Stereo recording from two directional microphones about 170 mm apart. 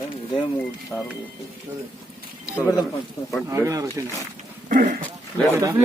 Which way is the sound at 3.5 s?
15° right (ahead or behind).